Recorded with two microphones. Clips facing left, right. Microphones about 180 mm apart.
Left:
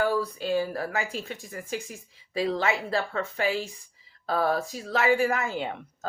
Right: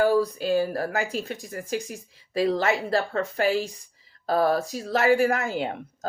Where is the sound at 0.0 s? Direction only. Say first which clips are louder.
Right 5 dB; 40° right (ahead or behind).